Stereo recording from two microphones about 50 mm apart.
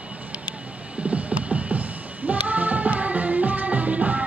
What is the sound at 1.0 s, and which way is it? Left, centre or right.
Music, right.